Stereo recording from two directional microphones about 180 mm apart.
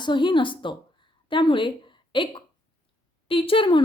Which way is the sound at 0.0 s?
25° left (ahead or behind).